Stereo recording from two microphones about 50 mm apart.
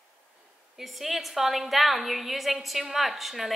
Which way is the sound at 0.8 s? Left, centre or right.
Centre.